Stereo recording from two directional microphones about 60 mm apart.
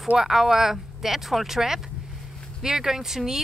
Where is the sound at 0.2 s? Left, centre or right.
Centre.